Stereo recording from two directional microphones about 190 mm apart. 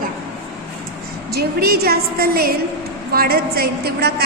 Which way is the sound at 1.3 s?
55° right (ahead or behind).